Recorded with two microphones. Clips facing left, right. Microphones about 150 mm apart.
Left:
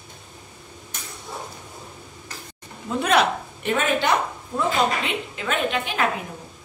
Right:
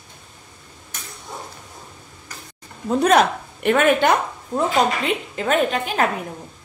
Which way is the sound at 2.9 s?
45° right (ahead or behind).